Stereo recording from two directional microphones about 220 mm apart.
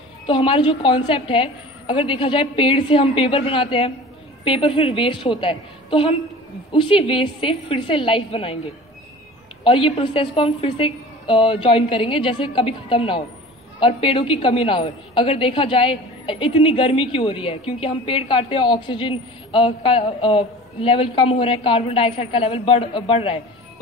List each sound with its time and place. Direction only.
0.3 s a woman's voice: 25° left (ahead or behind)
9.7 s a woman's voice: 25° left (ahead or behind)